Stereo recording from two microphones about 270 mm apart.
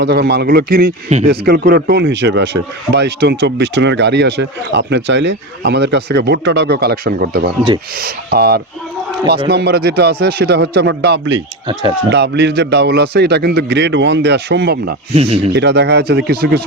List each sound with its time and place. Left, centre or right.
0.0 s speech: right
15.1 s speech: right
15.5 s speech: right